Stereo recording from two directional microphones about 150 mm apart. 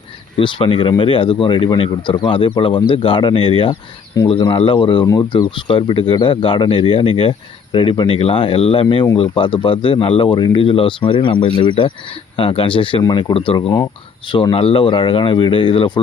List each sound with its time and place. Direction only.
0.3 s speech: 35° left (ahead or behind)